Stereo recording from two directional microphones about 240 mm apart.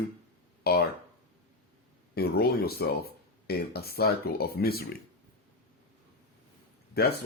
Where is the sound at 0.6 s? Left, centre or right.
Left.